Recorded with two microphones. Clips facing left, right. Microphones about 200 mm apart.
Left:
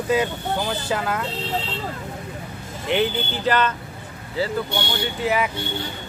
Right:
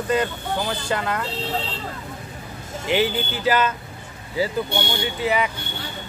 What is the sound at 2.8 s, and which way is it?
Speech, 5° right (ahead or behind).